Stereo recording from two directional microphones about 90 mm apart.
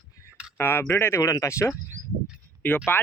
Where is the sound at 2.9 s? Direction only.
25° left (ahead or behind).